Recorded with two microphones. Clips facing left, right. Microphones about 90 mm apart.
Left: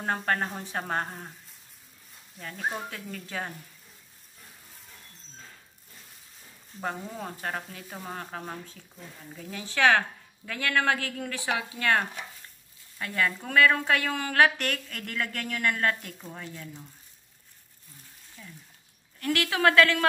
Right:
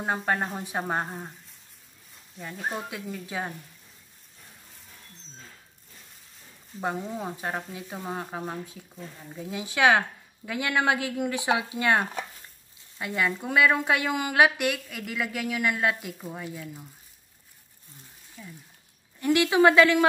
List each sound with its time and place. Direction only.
0.0 s speech: 10° right (ahead or behind)
2.4 s speech: 10° right (ahead or behind)
6.8 s speech: 10° right (ahead or behind)
18.4 s a sound: 5° right (ahead or behind)
19.1 s speech: 20° right (ahead or behind)